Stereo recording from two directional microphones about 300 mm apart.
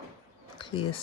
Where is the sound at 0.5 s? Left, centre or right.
Centre.